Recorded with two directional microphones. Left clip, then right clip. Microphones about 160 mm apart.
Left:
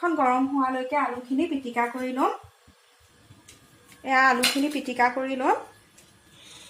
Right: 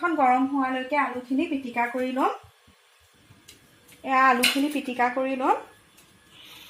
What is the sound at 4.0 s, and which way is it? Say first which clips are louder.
A woman's voice: even; 20° right (ahead or behind).